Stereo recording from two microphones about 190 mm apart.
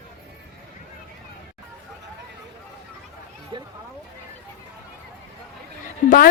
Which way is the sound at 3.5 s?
25° right (ahead or behind).